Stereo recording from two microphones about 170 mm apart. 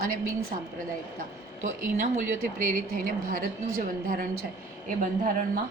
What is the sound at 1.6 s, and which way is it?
A woman's voice, 45° right (ahead or behind).